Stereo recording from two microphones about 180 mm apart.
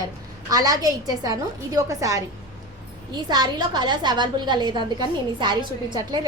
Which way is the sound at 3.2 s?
25° right (ahead or behind).